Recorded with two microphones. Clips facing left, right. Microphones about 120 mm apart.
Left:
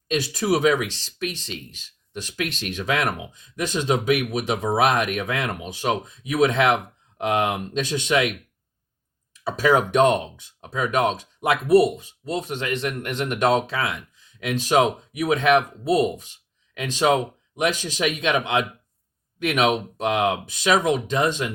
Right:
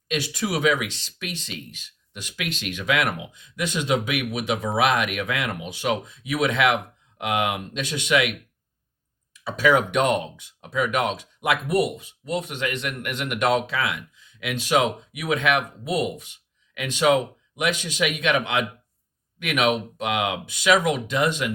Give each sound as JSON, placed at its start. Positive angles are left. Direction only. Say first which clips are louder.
{"t": 0.1, "sound": "speech", "louder": "left 4 dB", "side_deg": 35}
{"t": 9.4, "sound": "speech", "louder": "left 1 dB", "side_deg": 35}
{"t": 18.3, "sound": "speech", "louder": "left 1 dB", "side_deg": 25}